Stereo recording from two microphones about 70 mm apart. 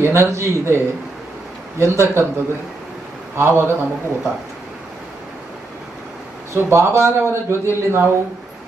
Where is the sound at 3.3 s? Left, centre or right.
Right.